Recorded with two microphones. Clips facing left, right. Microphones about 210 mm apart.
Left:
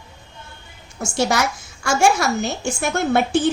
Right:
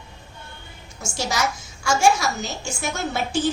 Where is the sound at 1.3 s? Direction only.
60° left (ahead or behind).